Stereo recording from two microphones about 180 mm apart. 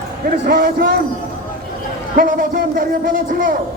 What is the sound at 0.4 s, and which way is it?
Speech, 60° right (ahead or behind).